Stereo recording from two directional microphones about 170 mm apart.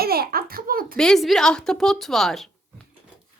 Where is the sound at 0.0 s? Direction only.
65° right (ahead or behind).